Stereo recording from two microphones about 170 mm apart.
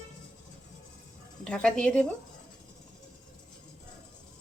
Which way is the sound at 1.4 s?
5° left (ahead or behind).